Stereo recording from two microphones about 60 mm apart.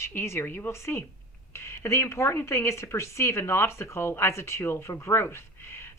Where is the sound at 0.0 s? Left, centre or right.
Left.